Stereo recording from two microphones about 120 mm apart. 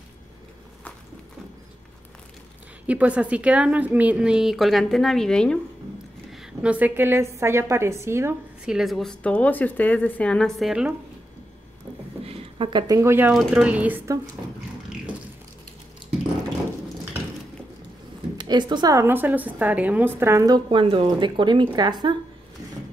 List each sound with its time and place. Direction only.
2.9 s a woman's voice: 10° right (ahead or behind); by 5.6 s 5° left (ahead or behind)
6.3 s a woman's voice: 5° right (ahead or behind)
8.6 s speech: centre (ahead or behind)
12.3 s speech: 50° right (ahead or behind); by 13.3 s 20° right (ahead or behind)
13.3 s speech: centre (ahead or behind)
13.7 s a woman's voice: 15° right (ahead or behind)
18.4 s a woman's voice: 40° right (ahead or behind)
18.9 s a woman's voice: 15° right (ahead or behind)
20.4 s speech: 35° right (ahead or behind)
20.8 s speech: 50° right (ahead or behind)